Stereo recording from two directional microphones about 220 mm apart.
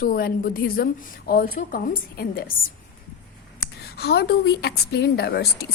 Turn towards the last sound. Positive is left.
turn(degrees=45)  # may be behind; listen again after turning